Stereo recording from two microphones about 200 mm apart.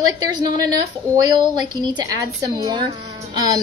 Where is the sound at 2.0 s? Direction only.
15° right (ahead or behind).